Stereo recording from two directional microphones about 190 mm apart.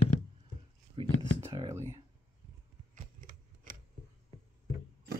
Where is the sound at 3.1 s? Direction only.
45° right (ahead or behind).